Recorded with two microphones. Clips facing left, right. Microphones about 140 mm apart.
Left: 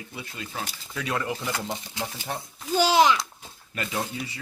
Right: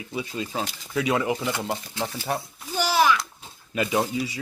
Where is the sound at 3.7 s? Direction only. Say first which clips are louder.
Right 7 dB; 15° right (ahead or behind).